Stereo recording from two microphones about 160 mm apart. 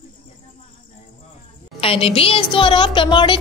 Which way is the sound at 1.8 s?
35° left (ahead or behind).